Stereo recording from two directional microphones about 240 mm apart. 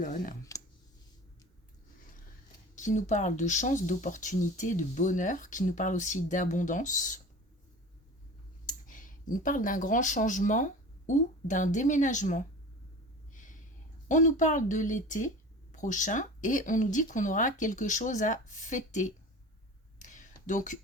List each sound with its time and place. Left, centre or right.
0.0 s speech: left
2.7 s speech: left
8.6 s speech: left
13.3 s a sound: left
14.1 s speech: left
20.0 s a sound: left